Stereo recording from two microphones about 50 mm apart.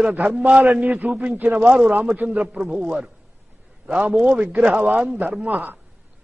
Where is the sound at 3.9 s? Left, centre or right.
Right.